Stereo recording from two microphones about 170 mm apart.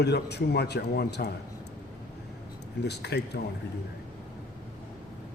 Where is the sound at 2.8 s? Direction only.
80° left.